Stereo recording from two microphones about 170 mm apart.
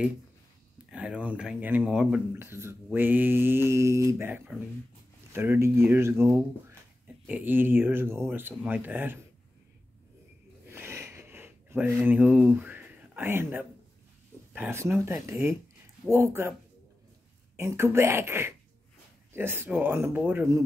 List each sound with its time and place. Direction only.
0.8 s speech: 5° right (ahead or behind)
10.7 s a sound: 15° right (ahead or behind)
14.5 s speech: 10° right (ahead or behind)
17.6 s speech: 15° right (ahead or behind)